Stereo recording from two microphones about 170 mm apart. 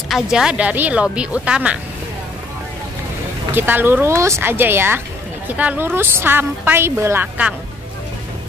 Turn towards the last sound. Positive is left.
turn(degrees=-10)  # may be behind; listen again after turning